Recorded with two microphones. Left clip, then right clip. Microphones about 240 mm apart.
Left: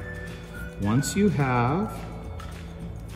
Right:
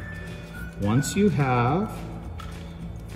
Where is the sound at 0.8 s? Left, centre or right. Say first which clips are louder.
Right 1 dB; centre.